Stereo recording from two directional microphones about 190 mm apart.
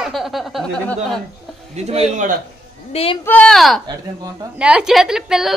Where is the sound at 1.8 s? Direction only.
35° right (ahead or behind).